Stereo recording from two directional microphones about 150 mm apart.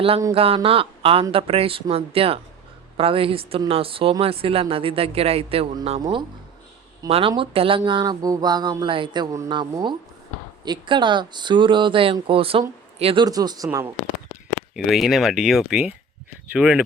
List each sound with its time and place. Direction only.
0.3 s speech: 40° right (ahead or behind)
13.2 s speech: 25° right (ahead or behind)
14.8 s speech: centre (ahead or behind)